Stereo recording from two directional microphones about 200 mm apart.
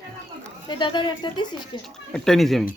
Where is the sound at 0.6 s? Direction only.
25° left (ahead or behind).